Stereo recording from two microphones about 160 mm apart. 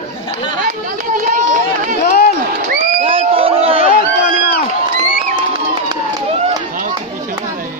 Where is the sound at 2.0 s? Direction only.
70° left (ahead or behind).